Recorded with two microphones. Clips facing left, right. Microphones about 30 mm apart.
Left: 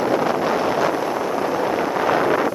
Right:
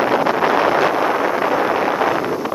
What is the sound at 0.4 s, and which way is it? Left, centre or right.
Wind noise, right.